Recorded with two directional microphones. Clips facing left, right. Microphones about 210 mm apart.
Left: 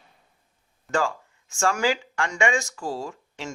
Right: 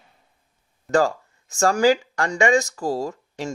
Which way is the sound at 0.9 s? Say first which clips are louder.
Right 6 dB; 40° right (ahead or behind).